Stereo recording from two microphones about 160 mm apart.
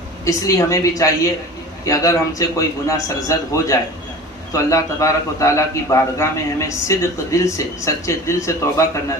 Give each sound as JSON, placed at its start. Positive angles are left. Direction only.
{"t": 0.3, "sound": "a man's voice", "side_deg": 20}